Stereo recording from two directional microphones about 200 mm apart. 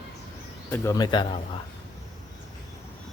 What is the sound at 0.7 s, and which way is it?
Speech, 15° left (ahead or behind).